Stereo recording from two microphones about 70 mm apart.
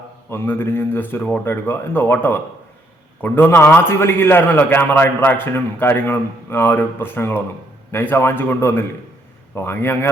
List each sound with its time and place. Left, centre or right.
0.3 s a man's voice: left